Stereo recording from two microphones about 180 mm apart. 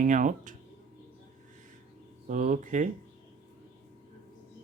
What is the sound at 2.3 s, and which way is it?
Speech, 45° right (ahead or behind).